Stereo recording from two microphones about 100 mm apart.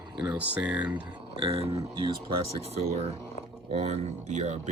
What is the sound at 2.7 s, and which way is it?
Speech, 90° right.